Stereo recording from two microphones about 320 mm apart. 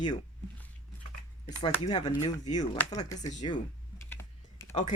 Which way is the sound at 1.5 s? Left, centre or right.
Centre.